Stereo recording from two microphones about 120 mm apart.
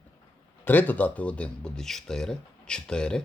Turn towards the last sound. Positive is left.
turn(degrees=5)  # may be behind; listen again after turning